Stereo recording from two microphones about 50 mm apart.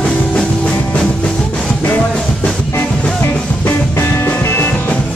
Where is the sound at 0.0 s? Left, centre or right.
Centre.